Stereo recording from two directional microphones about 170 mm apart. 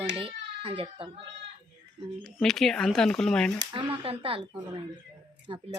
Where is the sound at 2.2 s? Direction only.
Centre (ahead or behind).